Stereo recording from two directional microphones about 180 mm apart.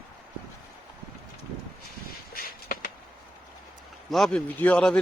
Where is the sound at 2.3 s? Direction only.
50° left (ahead or behind).